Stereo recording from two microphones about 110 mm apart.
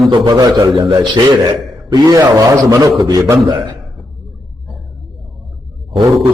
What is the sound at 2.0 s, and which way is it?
A man's voice, 30° right (ahead or behind).